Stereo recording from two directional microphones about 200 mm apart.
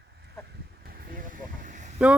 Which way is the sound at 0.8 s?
50° right (ahead or behind).